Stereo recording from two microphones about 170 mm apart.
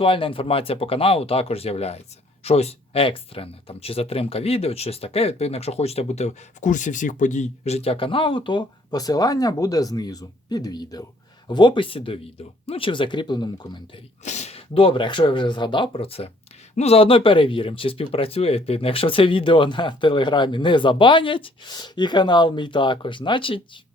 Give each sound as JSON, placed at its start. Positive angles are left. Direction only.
{"t": 0.0, "sound": "speech", "side_deg": 30}
{"t": 14.3, "sound": "speech", "side_deg": 40}